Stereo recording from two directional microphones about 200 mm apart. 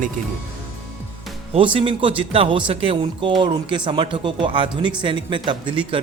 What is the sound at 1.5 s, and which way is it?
Speech, 25° right (ahead or behind).